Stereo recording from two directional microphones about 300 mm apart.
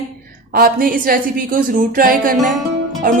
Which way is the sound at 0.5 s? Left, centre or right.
Right.